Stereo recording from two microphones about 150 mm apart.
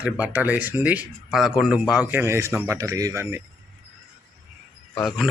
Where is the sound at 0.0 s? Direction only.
10° right (ahead or behind).